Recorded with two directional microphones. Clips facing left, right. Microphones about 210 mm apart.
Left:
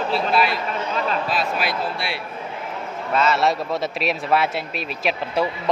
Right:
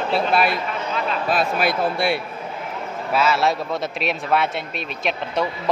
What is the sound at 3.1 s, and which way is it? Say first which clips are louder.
A man's voice: even; 5° right (ahead or behind).